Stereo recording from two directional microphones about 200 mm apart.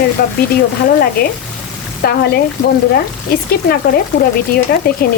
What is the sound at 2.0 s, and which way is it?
Speech, 50° left (ahead or behind).